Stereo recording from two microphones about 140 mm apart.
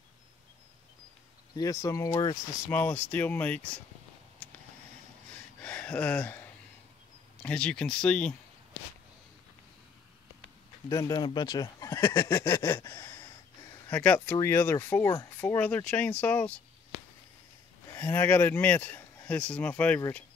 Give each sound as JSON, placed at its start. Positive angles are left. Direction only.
{"t": 1.6, "sound": "speech", "side_deg": 25}
{"t": 2.7, "sound": "speech", "side_deg": 15}
{"t": 5.6, "sound": "a sound", "side_deg": 10}
{"t": 7.4, "sound": "speech", "side_deg": 5}
{"t": 10.9, "sound": "speech", "side_deg": 25}
{"t": 13.8, "sound": "speech", "side_deg": 10}
{"t": 17.9, "sound": "speech", "side_deg": 15}